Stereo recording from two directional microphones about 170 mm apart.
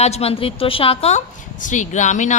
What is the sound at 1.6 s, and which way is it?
Speech, 45° left (ahead or behind).